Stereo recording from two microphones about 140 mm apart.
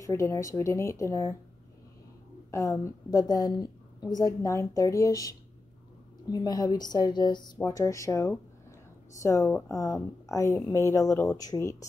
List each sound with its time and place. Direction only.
0.0 s speech: 20° left (ahead or behind)
2.5 s speech: 25° left (ahead or behind)